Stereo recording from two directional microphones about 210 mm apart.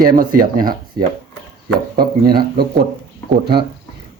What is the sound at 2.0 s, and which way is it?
Speech, 45° right (ahead or behind).